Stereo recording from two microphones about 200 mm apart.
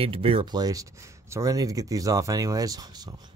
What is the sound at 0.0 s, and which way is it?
Speech, 30° right (ahead or behind).